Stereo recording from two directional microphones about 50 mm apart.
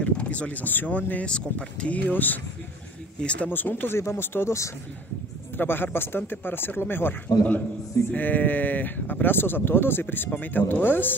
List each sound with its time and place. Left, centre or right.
0.0 s speech: left
1.2 s speech: left
3.2 s speech: left
3.4 s speech: left
3.9 s speech: left
4.5 s speech: left
5.6 s speech: left